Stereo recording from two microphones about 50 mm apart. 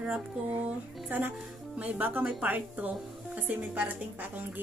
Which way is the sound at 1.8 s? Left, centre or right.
Right.